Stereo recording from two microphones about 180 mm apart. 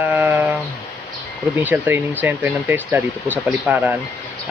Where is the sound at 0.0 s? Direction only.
10° right (ahead or behind).